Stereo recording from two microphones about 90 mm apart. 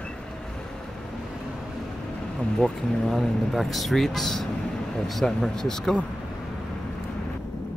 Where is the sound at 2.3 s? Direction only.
10° left (ahead or behind).